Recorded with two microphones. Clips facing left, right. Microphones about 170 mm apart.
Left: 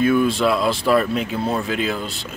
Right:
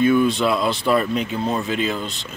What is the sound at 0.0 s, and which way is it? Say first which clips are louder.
Speech: even; centre (ahead or behind).